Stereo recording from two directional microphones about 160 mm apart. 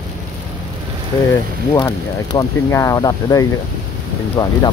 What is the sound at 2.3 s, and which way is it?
Speech, 20° left (ahead or behind).